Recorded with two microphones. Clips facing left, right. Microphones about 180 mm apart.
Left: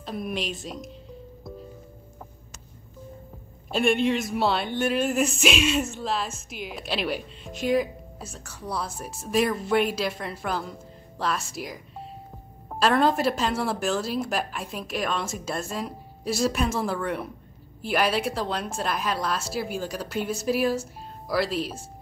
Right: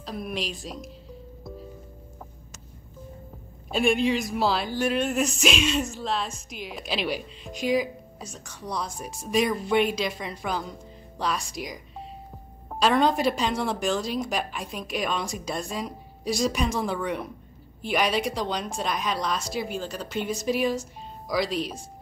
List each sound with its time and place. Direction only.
0.0 s speech: centre (ahead or behind)
3.7 s speech: centre (ahead or behind)